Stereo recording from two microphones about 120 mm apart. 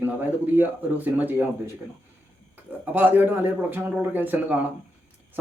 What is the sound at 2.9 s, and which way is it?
A man's voice, 15° right (ahead or behind).